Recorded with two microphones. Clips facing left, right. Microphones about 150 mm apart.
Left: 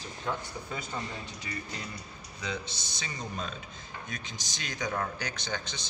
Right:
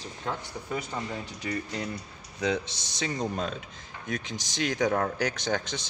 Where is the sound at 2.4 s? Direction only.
80° right.